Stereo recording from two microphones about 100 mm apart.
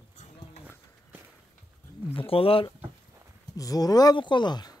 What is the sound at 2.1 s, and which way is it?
Speech, 70° left (ahead or behind).